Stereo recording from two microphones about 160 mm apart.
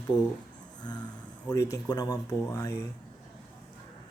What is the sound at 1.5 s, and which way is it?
Speech, 20° left (ahead or behind).